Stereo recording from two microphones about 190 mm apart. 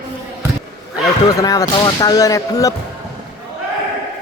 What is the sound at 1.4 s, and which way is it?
Speech, 20° left (ahead or behind).